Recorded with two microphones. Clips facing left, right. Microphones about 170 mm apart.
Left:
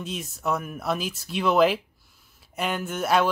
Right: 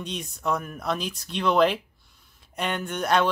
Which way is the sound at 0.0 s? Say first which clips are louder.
Even; 5° left (ahead or behind).